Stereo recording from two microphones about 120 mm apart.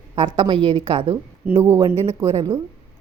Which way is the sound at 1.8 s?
45° right (ahead or behind).